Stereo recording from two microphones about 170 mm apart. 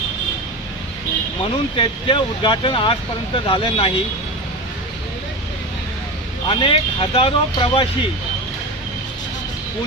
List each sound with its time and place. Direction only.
1.7 s speech: 30° left (ahead or behind)
6.5 s speech: 30° left (ahead or behind)